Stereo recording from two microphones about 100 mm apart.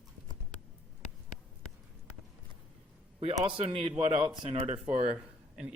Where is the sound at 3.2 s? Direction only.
90° right; by 4.3 s 65° right (ahead or behind).